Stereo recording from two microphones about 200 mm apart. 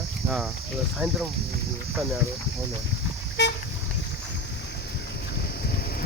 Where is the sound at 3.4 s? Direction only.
60° left (ahead or behind).